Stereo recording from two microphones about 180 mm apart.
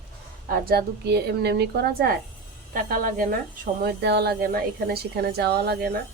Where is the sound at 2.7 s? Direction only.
50° right (ahead or behind).